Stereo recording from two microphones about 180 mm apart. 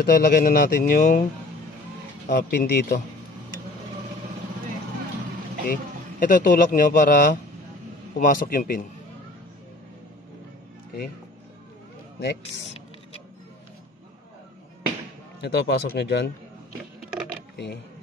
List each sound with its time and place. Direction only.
0.0 s speech: 55° left (ahead or behind)
2.2 s speech: 65° left (ahead or behind)
5.7 s speech: 50° left (ahead or behind)
15.4 s speech: 75° left (ahead or behind)